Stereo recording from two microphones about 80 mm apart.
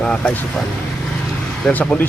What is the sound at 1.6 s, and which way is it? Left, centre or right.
Speech, centre.